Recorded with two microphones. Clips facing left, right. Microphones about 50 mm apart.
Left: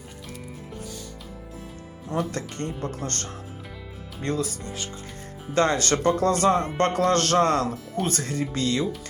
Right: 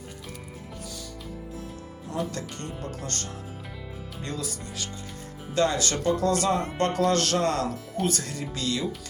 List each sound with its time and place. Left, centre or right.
2.3 s speech: left